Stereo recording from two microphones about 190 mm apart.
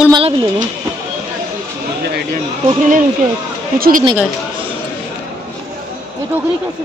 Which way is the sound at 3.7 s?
50° right (ahead or behind).